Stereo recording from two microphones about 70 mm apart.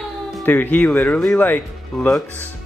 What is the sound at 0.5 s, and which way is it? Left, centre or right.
Speech, left.